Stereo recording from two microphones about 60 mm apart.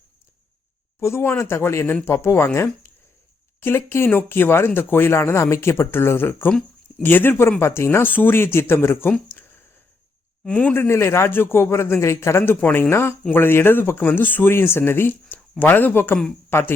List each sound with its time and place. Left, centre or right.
1.0 s a man's voice: left
10.8 s a man's voice: left
12.5 s a man's voice: left